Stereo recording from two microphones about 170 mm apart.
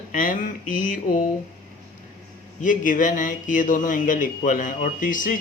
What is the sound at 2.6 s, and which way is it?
Speech, 50° left (ahead or behind).